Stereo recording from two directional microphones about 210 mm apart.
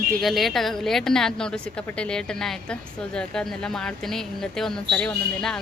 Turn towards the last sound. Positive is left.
turn(degrees=5)  # may be behind; listen again after turning